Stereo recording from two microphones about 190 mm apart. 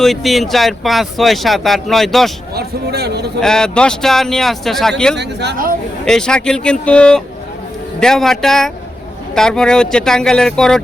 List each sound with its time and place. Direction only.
0.0 s speech: centre (ahead or behind)
2.6 s speech: 60° right (ahead or behind)
3.4 s speech: 5° left (ahead or behind)
5.1 s speech: 60° right (ahead or behind)
6.1 s speech: 5° left (ahead or behind)